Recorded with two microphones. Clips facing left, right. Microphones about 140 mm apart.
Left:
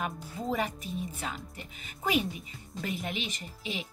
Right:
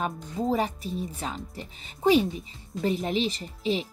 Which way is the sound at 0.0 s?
35° right (ahead or behind).